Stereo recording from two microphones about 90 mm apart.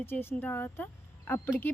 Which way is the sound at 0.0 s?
25° left (ahead or behind).